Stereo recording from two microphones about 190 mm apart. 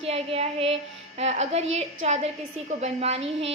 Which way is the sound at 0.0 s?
30° right (ahead or behind).